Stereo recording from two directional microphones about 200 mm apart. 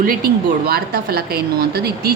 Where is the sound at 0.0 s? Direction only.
45° right (ahead or behind).